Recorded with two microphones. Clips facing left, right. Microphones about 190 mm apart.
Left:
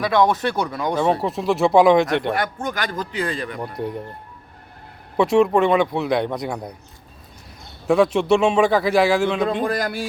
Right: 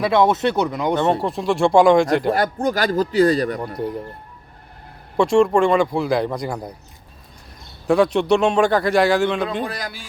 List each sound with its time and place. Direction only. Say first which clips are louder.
0.0 s speech: right 2 dB; 25° right (ahead or behind)
1.2 s a man's voice: right 1 dB; centre (ahead or behind)
2.3 s speech: right 5 dB; 35° right (ahead or behind)
3.8 s a man's voice: even; centre (ahead or behind)
5.1 s a man's voice: right 1 dB; 5° left (ahead or behind)
7.9 s a man's voice: even; centre (ahead or behind)
9.6 s speech: left 7 dB; 50° left (ahead or behind)